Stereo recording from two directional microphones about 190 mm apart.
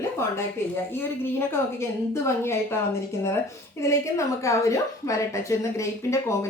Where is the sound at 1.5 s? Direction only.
15° left (ahead or behind).